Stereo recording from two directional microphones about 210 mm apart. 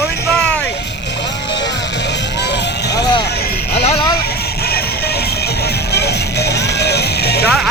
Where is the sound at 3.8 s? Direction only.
30° left (ahead or behind).